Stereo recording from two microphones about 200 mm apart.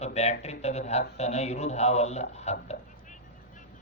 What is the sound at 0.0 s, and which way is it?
Speech, 35° left (ahead or behind).